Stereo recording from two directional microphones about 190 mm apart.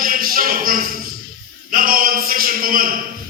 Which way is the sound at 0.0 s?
50° right (ahead or behind).